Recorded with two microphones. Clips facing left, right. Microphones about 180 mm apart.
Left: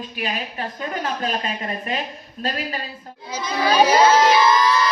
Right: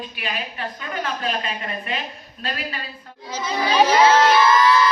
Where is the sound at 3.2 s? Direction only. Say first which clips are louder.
Left 2 dB; 10° left (ahead or behind).